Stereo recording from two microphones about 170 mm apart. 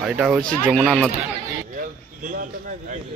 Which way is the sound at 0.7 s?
Centre (ahead or behind).